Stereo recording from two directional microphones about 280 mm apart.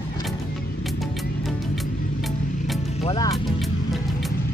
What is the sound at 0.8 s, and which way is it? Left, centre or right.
Music, centre.